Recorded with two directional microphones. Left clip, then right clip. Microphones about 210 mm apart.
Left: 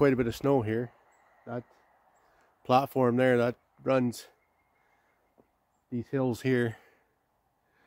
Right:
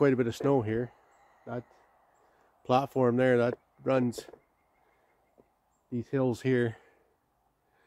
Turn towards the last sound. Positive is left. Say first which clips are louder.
# even
turn(degrees=25)  # may be behind; listen again after turning